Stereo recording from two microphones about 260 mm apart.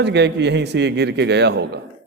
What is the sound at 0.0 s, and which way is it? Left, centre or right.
A man's voice, right.